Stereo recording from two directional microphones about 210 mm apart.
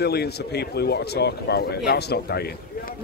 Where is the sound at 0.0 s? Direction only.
50° left (ahead or behind).